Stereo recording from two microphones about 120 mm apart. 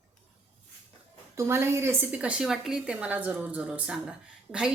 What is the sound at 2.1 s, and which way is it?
A woman's voice, 10° right (ahead or behind).